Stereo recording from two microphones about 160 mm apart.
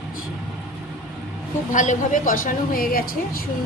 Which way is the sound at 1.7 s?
50° left (ahead or behind).